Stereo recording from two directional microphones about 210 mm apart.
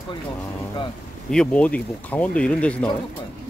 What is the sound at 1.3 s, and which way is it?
Speech, 5° left (ahead or behind).